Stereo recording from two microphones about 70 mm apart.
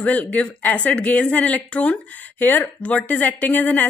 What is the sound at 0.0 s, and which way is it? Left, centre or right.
A woman's voice, left.